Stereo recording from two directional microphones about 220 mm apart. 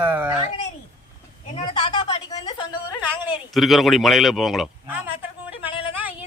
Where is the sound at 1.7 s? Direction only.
20° left (ahead or behind).